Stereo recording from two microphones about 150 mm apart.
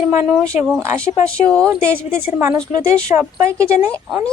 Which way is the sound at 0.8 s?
20° right (ahead or behind).